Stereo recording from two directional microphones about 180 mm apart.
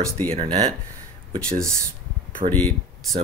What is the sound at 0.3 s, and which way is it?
Speech, 35° right (ahead or behind).